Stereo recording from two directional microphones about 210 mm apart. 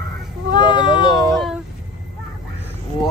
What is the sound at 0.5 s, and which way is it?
Speech, 20° left (ahead or behind).